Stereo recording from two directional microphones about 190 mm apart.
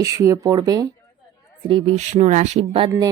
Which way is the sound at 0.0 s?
15° right (ahead or behind).